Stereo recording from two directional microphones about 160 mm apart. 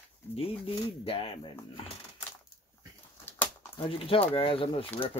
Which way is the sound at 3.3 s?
15° left (ahead or behind).